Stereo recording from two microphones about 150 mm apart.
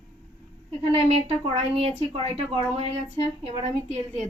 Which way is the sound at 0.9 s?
40° right (ahead or behind).